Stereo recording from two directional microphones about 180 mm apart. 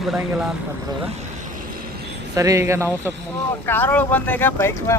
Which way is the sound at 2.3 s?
20° right (ahead or behind).